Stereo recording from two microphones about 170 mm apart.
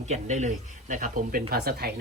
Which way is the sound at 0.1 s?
45° right (ahead or behind).